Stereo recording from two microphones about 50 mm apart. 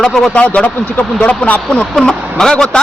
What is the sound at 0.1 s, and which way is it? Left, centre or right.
Speech, centre.